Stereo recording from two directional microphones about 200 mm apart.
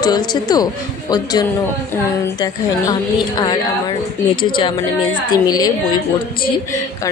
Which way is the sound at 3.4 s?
20° left (ahead or behind).